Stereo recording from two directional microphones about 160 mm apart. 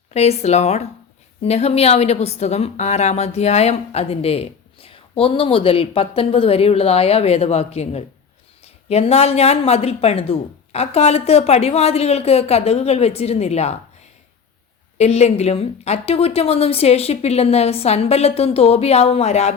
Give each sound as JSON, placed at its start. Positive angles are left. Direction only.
{"t": 0.1, "sound": "a woman's voice", "side_deg": 40}
{"t": 14.9, "sound": "a woman's voice", "side_deg": 40}